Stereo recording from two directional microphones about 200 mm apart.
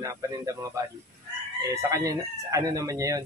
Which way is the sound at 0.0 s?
15° right (ahead or behind).